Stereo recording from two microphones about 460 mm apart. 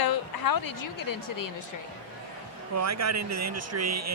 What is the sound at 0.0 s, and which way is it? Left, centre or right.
A woman's voice, left.